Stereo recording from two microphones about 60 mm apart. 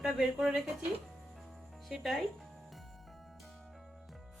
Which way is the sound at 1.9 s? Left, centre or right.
Centre.